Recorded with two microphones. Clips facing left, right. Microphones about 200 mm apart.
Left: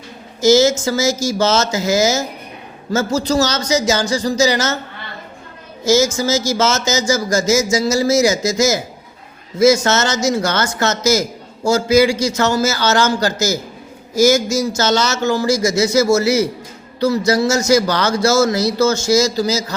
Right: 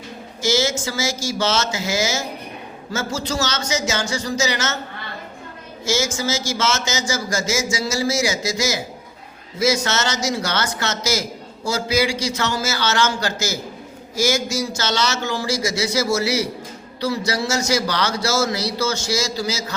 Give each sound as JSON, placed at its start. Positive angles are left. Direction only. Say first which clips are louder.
{"t": 0.4, "sound": "speech", "louder": "left 9 dB", "side_deg": 40}
{"t": 5.8, "sound": "a man's voice", "louder": "left 8 dB", "side_deg": 40}